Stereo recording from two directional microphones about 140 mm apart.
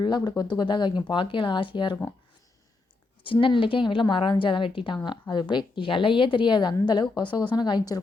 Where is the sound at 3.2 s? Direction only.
40° left (ahead or behind).